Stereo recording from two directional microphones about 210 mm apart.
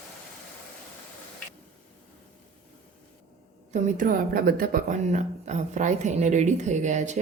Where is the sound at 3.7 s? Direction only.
40° right (ahead or behind).